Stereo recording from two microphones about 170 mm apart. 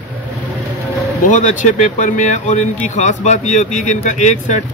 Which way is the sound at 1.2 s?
50° left (ahead or behind).